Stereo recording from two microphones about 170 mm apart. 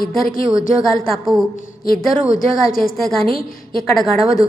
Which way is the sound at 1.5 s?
60° left (ahead or behind).